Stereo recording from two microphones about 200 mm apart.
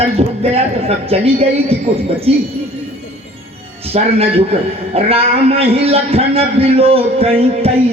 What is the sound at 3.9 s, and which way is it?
A man's voice, 30° right (ahead or behind).